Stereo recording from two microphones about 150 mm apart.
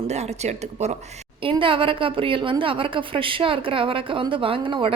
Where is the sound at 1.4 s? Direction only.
35° right (ahead or behind).